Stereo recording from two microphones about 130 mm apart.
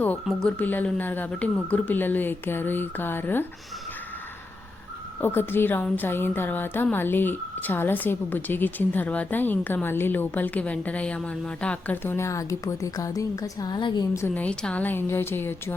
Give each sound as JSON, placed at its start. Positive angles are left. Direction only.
{"t": 0.3, "sound": "a woman's voice", "side_deg": 10}
{"t": 5.2, "sound": "a woman's voice", "side_deg": 15}
{"t": 14.2, "sound": "a woman's voice", "side_deg": 15}